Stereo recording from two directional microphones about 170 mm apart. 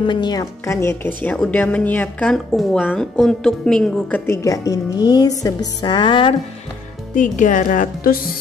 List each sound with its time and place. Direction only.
0.0 s a woman's voice: 25° left (ahead or behind); by 4.2 s 5° left (ahead or behind)
4.3 s a woman's voice: 20° left (ahead or behind)
7.2 s speech: 50° left (ahead or behind)